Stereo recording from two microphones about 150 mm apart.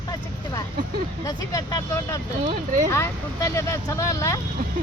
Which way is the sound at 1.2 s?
25° left (ahead or behind).